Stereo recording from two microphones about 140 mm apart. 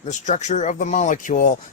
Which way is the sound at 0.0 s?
60° left (ahead or behind).